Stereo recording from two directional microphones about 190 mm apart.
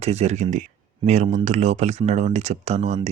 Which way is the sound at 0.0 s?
35° right (ahead or behind).